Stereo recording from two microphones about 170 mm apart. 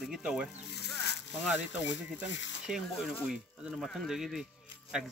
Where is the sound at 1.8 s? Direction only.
90° left.